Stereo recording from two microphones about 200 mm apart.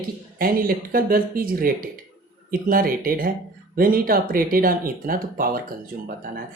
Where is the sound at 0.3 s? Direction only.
45° right (ahead or behind).